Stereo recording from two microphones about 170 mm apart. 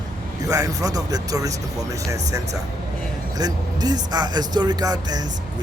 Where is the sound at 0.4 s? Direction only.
20° right (ahead or behind).